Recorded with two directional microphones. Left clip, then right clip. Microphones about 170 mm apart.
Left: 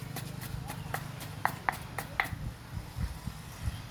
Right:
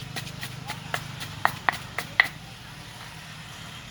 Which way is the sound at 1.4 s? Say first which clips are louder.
Right 7 dB; 40° right (ahead or behind).